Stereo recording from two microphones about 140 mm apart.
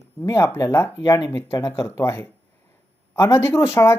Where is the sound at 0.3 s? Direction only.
20° left (ahead or behind).